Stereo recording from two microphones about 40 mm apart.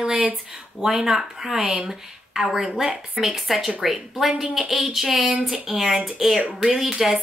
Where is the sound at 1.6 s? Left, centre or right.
Right.